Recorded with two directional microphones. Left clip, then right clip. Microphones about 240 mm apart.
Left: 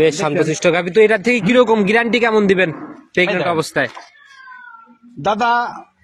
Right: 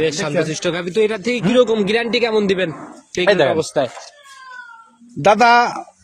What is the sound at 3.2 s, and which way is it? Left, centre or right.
Speech, right.